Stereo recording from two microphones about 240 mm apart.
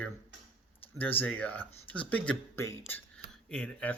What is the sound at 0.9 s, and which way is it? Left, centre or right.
Speech, centre.